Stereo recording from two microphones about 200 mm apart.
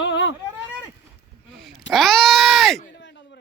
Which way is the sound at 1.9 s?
Centre (ahead or behind).